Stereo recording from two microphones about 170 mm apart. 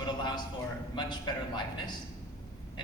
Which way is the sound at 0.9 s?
25° left (ahead or behind).